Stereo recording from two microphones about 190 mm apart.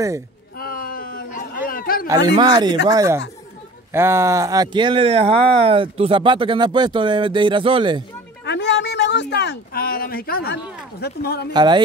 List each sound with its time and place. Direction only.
0.6 s a sound: 50° left (ahead or behind)
2.0 s speech: 20° right (ahead or behind)
8.5 s speech: 65° left (ahead or behind)
11.5 s speech: 25° right (ahead or behind)